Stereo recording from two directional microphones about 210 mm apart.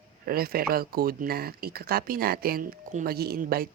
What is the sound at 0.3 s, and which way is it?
Speech, 45° right (ahead or behind).